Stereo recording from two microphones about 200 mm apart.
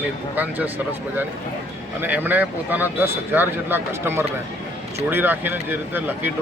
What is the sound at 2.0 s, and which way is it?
Speech, 10° right (ahead or behind).